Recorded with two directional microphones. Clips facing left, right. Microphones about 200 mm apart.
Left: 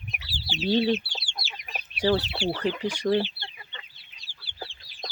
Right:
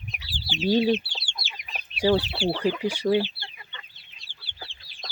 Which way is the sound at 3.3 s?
25° left (ahead or behind).